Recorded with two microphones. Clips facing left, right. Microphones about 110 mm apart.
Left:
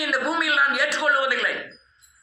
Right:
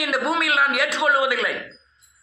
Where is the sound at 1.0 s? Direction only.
15° right (ahead or behind).